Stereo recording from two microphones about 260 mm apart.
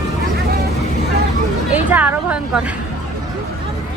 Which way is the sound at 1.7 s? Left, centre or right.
Centre.